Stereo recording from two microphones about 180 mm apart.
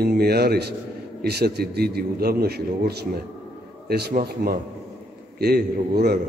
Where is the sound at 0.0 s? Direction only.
60° right (ahead or behind).